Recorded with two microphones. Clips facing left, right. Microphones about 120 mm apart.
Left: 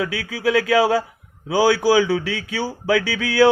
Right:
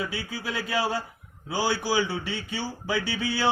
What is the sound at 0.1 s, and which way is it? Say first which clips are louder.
Speech: left 12 dB; 90° left.